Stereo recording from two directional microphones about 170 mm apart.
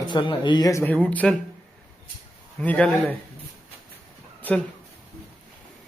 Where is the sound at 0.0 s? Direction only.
30° left (ahead or behind); by 1.4 s 10° left (ahead or behind).